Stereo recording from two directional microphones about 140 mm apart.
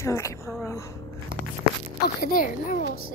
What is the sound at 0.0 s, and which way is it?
Speech, 20° left (ahead or behind).